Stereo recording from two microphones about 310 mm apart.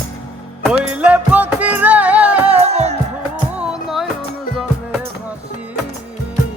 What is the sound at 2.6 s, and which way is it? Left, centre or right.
Music, centre.